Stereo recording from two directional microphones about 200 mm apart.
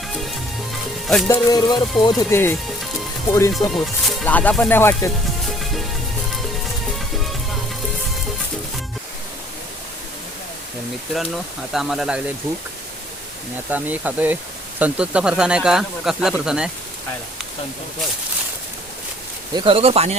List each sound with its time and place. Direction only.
0.1 s music: centre (ahead or behind)
1.3 s music: 20° left (ahead or behind)
2.0 s speech: 15° left (ahead or behind)
3.5 s speech: centre (ahead or behind)
5.5 s music: centre (ahead or behind)
6.9 s music: centre (ahead or behind)
11.7 s speech: centre (ahead or behind)
12.4 s speech: 15° right (ahead or behind)
13.7 s speech: 10° right (ahead or behind)
19.5 s speech: 30° right (ahead or behind)